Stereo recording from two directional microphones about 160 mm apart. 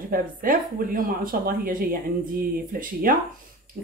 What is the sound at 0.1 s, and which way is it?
Speech, 65° right (ahead or behind).